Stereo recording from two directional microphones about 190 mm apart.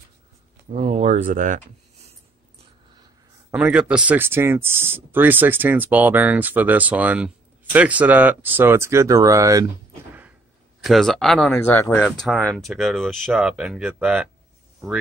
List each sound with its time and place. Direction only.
0.7 s speech: 30° right (ahead or behind)
3.5 s speech: 5° right (ahead or behind)
10.8 s speech: centre (ahead or behind)